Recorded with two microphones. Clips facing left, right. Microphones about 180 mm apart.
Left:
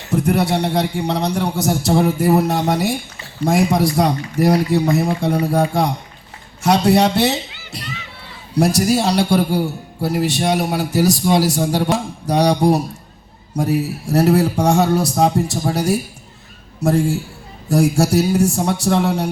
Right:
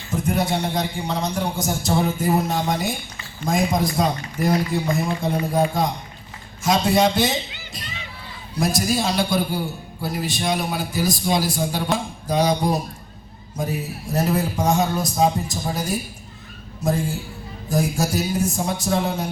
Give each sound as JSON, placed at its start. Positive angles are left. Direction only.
{"t": 0.0, "sound": "a man's voice", "side_deg": 70}